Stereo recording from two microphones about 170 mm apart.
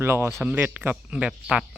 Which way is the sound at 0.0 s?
15° right (ahead or behind).